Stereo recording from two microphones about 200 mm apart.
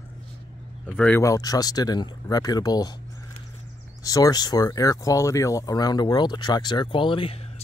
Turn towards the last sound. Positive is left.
turn(degrees=25)  # may be behind; listen again after turning